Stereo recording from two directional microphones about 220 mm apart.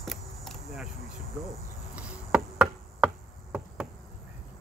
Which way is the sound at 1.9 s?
5° right (ahead or behind).